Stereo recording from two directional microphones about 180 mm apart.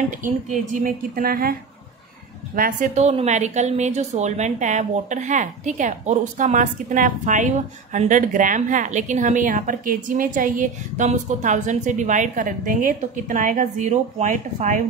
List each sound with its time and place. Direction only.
0.2 s a woman's voice: 45° right (ahead or behind)